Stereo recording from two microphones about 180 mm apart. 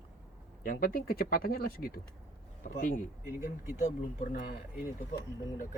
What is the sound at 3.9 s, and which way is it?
Speech, 45° left (ahead or behind).